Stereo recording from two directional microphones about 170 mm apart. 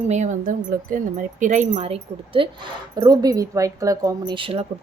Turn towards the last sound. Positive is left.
turn(degrees=-30)  # may be behind; listen again after turning